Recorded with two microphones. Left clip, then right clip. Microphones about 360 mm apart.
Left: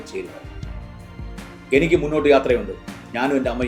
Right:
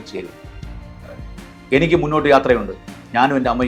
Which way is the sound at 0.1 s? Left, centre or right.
Right.